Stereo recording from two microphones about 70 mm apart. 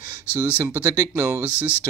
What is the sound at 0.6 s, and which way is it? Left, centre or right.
Speech, right.